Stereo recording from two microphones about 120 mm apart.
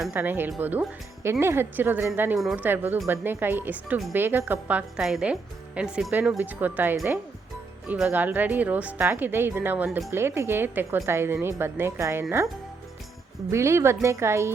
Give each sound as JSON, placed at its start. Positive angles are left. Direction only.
{"t": 0.1, "sound": "a woman's voice", "side_deg": -15}
{"t": 13.5, "sound": "a woman's voice", "side_deg": -25}